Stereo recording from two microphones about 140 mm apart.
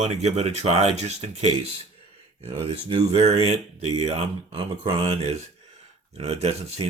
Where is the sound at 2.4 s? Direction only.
40° right (ahead or behind).